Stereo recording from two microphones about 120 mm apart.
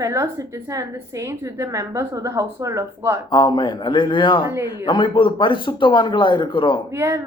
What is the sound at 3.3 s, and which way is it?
Speech, 35° left (ahead or behind).